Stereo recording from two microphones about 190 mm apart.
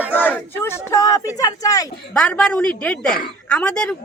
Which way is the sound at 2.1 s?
5° left (ahead or behind).